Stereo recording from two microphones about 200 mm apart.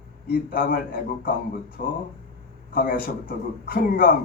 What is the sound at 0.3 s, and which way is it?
Speech, 45° left (ahead or behind).